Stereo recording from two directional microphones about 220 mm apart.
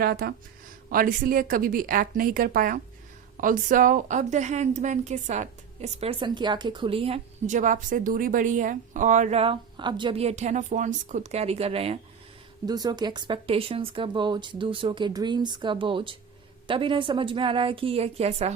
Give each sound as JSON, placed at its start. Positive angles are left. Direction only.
{"t": 0.0, "sound": "a woman's voice", "side_deg": -45}